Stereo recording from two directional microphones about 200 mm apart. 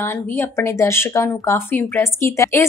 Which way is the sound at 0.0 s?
10° left (ahead or behind).